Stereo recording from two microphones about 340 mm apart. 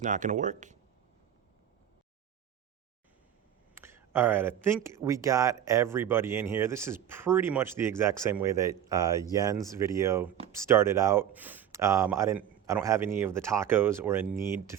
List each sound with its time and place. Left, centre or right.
0.0 s speech: right
3.8 s speech: centre